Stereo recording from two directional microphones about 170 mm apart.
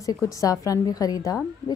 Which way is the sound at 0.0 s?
20° left (ahead or behind).